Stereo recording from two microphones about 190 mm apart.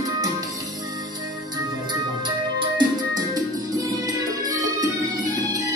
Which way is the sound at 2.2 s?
25° right (ahead or behind).